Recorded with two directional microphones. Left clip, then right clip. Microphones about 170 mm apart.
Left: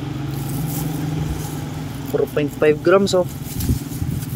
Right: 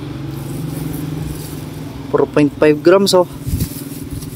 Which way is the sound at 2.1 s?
30° right (ahead or behind).